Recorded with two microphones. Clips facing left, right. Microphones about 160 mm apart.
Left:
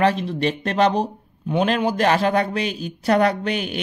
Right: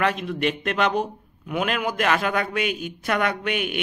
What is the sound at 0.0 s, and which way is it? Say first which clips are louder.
A man's voice: left 4 dB; 30° left (ahead or behind).